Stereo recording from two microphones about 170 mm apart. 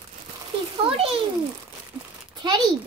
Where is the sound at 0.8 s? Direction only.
30° right (ahead or behind).